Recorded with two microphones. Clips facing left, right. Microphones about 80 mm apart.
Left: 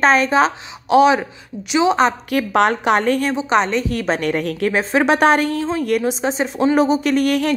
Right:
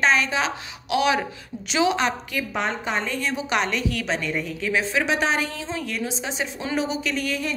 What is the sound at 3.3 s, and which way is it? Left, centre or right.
Speech, left.